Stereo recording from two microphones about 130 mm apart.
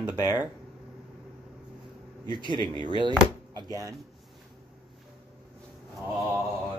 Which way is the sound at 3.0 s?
35° right (ahead or behind).